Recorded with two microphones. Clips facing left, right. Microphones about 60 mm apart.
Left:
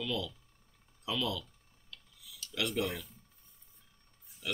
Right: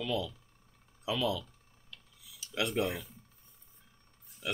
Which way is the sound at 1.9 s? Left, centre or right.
Centre.